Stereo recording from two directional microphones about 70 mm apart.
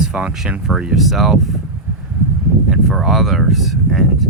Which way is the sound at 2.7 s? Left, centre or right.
Centre.